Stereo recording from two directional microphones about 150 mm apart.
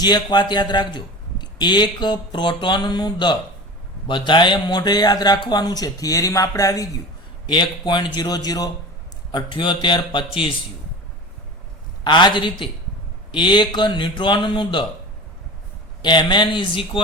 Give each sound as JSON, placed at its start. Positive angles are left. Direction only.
{"t": 0.0, "sound": "a man's voice", "side_deg": 30}
{"t": 12.0, "sound": "a man's voice", "side_deg": 30}
{"t": 16.0, "sound": "a man's voice", "side_deg": 30}